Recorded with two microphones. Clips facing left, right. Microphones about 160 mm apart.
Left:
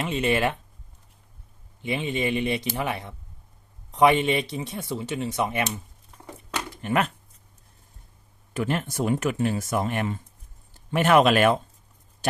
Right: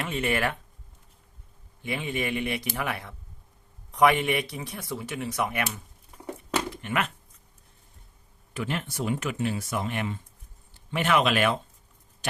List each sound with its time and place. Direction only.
0.0 s speech: 20° left (ahead or behind)
1.8 s speech: 20° left (ahead or behind)
6.8 s speech: 35° left (ahead or behind)
8.5 s speech: 45° left (ahead or behind)